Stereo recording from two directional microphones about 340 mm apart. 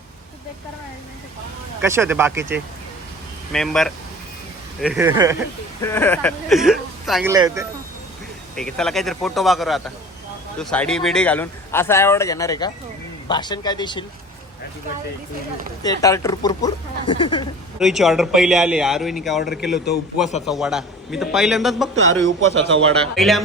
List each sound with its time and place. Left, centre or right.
1.8 s a man's voice: centre
5.8 s a man's voice: centre
8.5 s a man's voice: centre
15.8 s speech: centre
17.7 s a man's voice: centre